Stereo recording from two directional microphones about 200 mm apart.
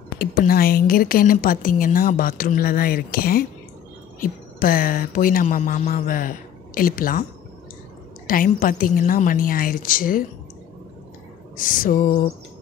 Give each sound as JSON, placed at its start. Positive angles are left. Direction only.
{"t": 0.2, "sound": "a woman's voice", "side_deg": 45}
{"t": 8.3, "sound": "a woman's voice", "side_deg": 45}
{"t": 11.5, "sound": "a woman's voice", "side_deg": 45}